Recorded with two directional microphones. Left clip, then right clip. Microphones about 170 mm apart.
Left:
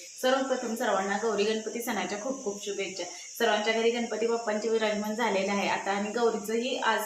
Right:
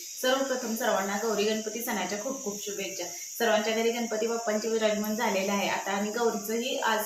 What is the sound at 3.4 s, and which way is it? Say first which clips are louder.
Speech: even; 5° left (ahead or behind).